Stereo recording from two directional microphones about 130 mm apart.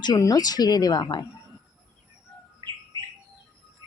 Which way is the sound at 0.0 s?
30° left (ahead or behind).